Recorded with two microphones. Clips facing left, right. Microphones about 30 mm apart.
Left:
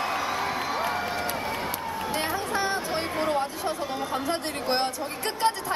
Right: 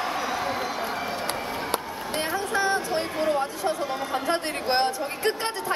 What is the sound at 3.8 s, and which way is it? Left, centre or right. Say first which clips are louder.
Speech: right 1 dB; centre.